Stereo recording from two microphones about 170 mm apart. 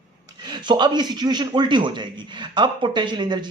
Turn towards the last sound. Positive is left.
turn(degrees=-25)  # may be behind; listen again after turning